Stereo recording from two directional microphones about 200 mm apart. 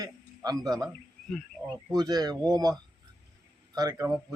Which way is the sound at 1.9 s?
20° right (ahead or behind).